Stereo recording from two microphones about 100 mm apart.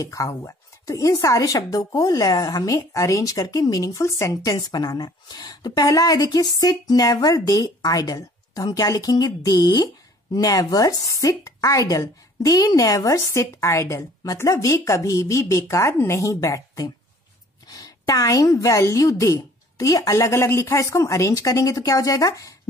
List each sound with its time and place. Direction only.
0.0 s speech: 35° left (ahead or behind)